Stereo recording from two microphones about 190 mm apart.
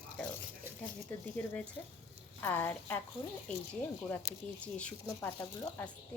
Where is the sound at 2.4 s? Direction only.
10° left (ahead or behind).